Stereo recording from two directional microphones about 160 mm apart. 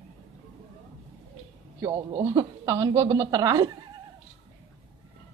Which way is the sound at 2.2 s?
25° right (ahead or behind).